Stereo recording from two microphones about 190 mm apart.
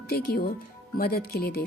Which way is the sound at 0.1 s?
55° left (ahead or behind).